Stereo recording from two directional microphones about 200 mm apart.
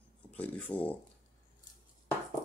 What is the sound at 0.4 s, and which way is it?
Rub, 5° left (ahead or behind).